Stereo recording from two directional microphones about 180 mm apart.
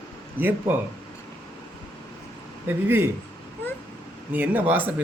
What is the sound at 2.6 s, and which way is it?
Speech, 10° right (ahead or behind).